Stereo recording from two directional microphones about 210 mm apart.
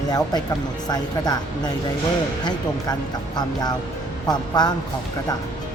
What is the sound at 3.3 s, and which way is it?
A woman's voice, 20° left (ahead or behind).